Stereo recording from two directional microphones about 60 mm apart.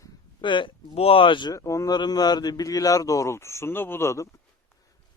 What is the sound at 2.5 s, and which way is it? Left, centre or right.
Speech, left.